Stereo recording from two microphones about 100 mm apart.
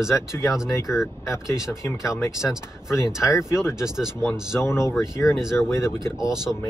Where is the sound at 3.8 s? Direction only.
5° right (ahead or behind).